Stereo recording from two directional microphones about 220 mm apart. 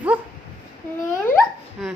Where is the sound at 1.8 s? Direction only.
Centre (ahead or behind).